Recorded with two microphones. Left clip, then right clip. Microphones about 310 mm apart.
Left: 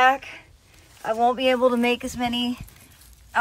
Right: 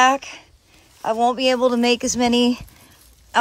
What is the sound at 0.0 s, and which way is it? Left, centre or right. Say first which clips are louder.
Speech: right 3 dB; centre.